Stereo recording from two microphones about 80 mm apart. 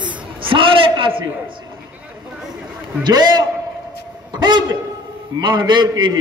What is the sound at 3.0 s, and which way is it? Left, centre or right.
A man's voice, right.